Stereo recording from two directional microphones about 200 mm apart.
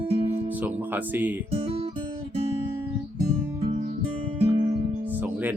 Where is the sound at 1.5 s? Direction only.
25° right (ahead or behind).